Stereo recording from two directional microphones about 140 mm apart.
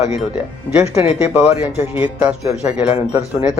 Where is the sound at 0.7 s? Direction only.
15° right (ahead or behind).